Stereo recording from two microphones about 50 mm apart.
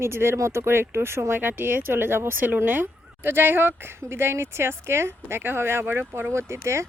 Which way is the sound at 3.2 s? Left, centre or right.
Right.